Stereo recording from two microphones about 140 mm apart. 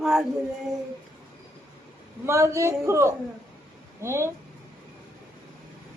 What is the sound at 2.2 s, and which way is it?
Speech, 20° right (ahead or behind).